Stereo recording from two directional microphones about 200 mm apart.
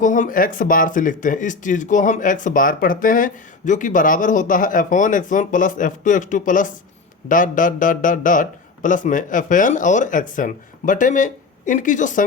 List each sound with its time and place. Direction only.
0.0 s speech: 40° left (ahead or behind)